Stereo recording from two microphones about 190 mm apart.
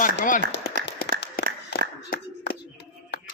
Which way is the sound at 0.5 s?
65° left (ahead or behind).